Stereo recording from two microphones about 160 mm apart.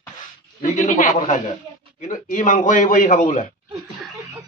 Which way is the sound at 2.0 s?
55° left (ahead or behind).